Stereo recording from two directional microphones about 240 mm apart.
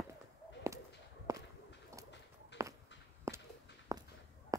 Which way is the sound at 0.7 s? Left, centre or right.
Centre.